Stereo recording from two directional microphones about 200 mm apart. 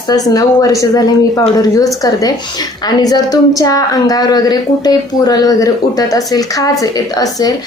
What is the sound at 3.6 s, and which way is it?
A woman's voice, 15° left (ahead or behind).